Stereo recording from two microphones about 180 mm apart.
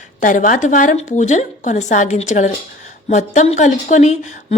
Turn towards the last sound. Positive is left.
turn(degrees=40)  # may be behind; listen again after turning